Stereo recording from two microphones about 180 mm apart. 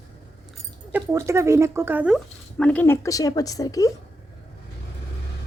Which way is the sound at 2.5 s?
10° left (ahead or behind).